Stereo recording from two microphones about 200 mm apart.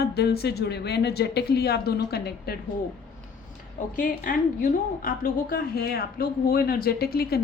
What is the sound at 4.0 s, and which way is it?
A woman's voice, 45° left (ahead or behind).